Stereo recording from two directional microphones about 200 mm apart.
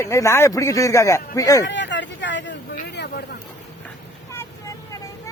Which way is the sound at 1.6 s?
60° left (ahead or behind).